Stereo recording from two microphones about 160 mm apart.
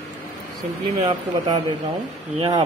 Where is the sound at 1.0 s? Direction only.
25° right (ahead or behind).